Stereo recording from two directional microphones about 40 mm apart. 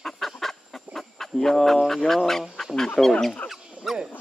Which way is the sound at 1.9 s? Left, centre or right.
Centre.